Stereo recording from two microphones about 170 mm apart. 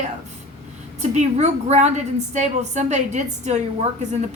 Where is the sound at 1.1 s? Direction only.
40° right (ahead or behind).